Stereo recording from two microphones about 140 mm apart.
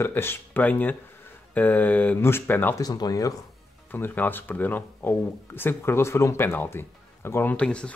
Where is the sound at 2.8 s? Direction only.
25° left (ahead or behind).